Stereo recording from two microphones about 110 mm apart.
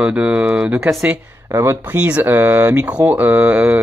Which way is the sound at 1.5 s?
25° right (ahead or behind).